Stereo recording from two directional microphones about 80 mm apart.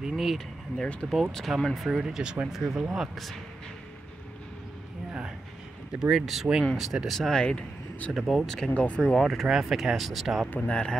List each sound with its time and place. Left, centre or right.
0.0 s speech: centre
5.9 s speech: centre
7.2 s speech: centre
8.1 s speech: centre
8.6 s speech: centre
9.0 s speech: centre
10.7 s speech: centre